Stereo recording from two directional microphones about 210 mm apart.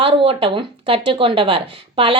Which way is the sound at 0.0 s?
25° right (ahead or behind).